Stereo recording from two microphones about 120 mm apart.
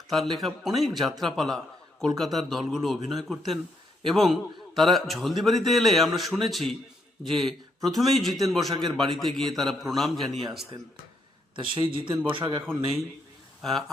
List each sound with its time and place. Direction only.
0.1 s a man's voice: centre (ahead or behind)
11.6 s speech: 45° right (ahead or behind)
13.6 s a man's voice: centre (ahead or behind)